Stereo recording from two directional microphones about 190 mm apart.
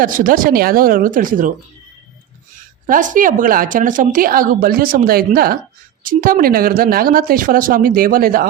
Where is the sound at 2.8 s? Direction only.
45° right (ahead or behind).